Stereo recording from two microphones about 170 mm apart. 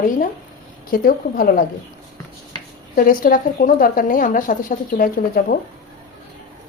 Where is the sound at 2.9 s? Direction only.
55° left (ahead or behind).